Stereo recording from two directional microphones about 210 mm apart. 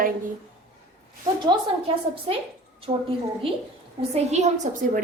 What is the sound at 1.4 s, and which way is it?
Speech, 25° right (ahead or behind).